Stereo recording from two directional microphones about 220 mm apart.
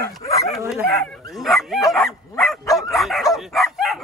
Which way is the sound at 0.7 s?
Centre (ahead or behind).